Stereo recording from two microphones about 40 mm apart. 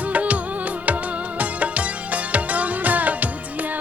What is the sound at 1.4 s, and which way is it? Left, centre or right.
Music, right.